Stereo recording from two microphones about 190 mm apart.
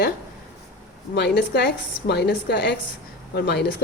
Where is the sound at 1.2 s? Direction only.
65° left (ahead or behind).